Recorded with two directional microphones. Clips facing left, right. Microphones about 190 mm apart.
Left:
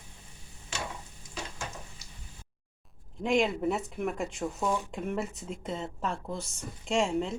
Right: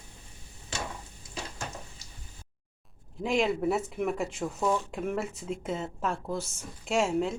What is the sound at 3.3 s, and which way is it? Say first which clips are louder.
Speech: even; centre (ahead or behind).